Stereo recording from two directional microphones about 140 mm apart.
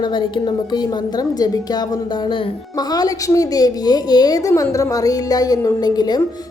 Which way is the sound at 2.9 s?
25° left (ahead or behind).